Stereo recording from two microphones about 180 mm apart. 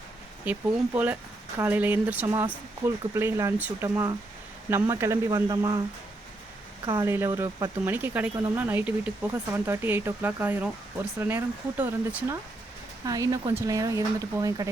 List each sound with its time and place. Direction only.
0.5 s speech: 10° right (ahead or behind)
6.9 s speech: 15° right (ahead or behind)